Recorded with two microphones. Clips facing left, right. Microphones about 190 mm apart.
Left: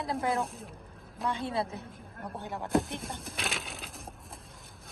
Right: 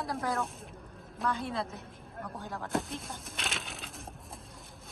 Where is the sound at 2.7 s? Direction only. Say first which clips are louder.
Left 6 dB; centre (ahead or behind).